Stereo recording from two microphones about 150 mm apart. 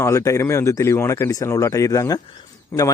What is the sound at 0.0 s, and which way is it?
Speech, 20° left (ahead or behind).